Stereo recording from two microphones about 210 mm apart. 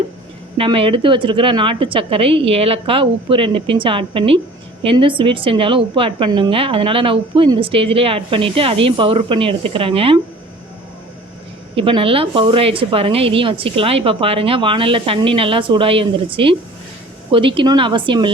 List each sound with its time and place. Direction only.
0.5 s a woman's voice: 25° right (ahead or behind)
11.7 s a woman's voice: 25° right (ahead or behind)